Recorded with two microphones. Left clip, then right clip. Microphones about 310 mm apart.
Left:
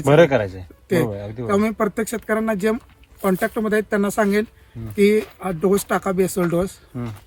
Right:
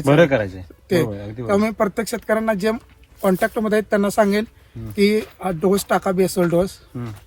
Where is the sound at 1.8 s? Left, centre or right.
Centre.